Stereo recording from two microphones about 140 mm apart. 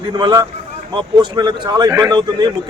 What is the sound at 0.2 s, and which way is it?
A man's voice, 30° right (ahead or behind).